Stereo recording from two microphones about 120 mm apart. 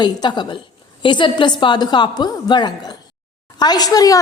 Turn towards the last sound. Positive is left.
turn(degrees=30)  # may be behind; listen again after turning